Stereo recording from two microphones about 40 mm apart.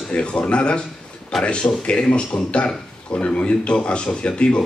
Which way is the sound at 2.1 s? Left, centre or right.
Left.